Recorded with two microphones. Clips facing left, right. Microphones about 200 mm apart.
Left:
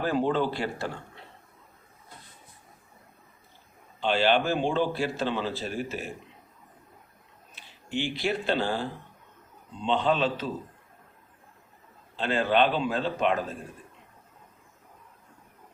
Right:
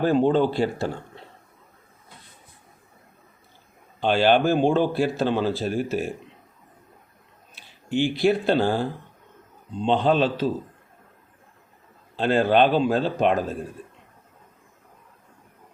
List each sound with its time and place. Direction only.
0.0 s speech: 30° right (ahead or behind)
4.0 s speech: 50° right (ahead or behind)
7.9 s speech: 50° right (ahead or behind)
12.1 s speech: 40° right (ahead or behind)